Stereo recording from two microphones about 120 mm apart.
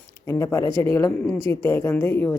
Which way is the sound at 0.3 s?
25° left (ahead or behind).